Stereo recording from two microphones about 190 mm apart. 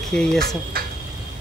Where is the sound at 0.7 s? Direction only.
50° right (ahead or behind).